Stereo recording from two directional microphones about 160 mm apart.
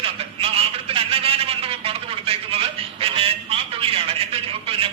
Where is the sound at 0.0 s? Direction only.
35° right (ahead or behind).